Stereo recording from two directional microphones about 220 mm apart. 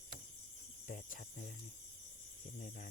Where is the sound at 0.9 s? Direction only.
35° left (ahead or behind).